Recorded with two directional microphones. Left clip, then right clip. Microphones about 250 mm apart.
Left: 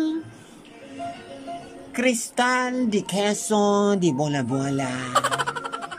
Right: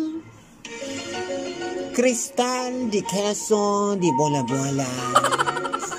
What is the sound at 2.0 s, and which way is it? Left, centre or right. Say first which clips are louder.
Music: right 1 dB; centre.